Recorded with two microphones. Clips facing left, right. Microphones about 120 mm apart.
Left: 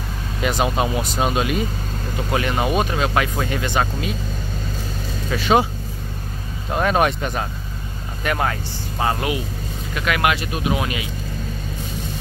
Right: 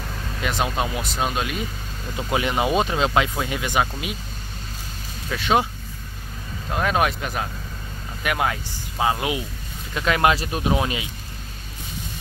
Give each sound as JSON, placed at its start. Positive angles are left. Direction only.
{"t": 0.4, "sound": "speech", "side_deg": 0}
{"t": 2.3, "sound": "speech", "side_deg": -15}
{"t": 5.3, "sound": "speech", "side_deg": 0}
{"t": 6.7, "sound": "speech", "side_deg": 0}
{"t": 9.9, "sound": "speech", "side_deg": -30}